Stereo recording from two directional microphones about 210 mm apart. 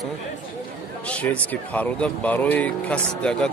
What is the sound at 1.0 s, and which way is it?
Speech, 5° left (ahead or behind).